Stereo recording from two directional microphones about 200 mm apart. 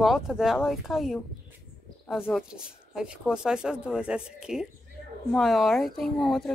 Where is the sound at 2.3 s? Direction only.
5° right (ahead or behind).